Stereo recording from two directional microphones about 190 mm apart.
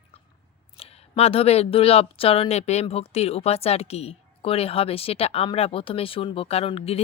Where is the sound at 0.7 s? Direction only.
30° left (ahead or behind).